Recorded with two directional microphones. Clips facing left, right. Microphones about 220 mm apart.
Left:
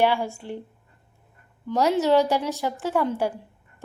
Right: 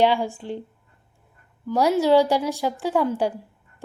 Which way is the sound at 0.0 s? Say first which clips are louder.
Right 2 dB; 15° right (ahead or behind).